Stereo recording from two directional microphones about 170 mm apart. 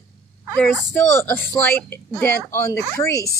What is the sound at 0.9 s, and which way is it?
A woman's voice, 15° left (ahead or behind).